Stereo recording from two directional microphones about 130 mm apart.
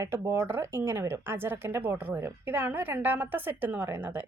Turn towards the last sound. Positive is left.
turn(degrees=-15)  # may be behind; listen again after turning